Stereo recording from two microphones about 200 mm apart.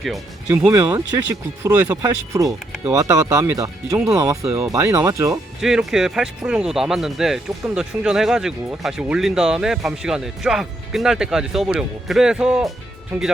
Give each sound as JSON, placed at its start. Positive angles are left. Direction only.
{"t": 0.4, "sound": "speech", "side_deg": -15}
{"t": 5.5, "sound": "speech", "side_deg": 0}